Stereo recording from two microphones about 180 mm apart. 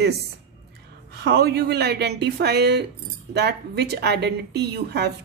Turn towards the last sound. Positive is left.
turn(degrees=-65)  # may be behind; listen again after turning